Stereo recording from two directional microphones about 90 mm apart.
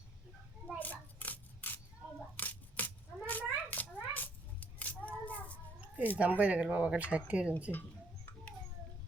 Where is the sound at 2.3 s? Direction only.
20° left (ahead or behind).